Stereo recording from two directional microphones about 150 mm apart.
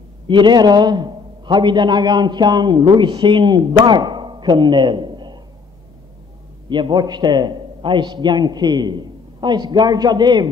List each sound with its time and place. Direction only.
0.3 s a man's voice: 30° right (ahead or behind)
6.7 s a man's voice: 30° right (ahead or behind)